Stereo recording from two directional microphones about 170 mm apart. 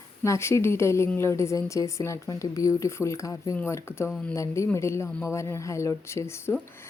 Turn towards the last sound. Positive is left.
turn(degrees=15)  # may be behind; listen again after turning